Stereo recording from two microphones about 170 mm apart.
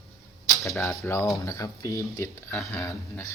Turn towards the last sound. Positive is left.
turn(degrees=15)  # may be behind; listen again after turning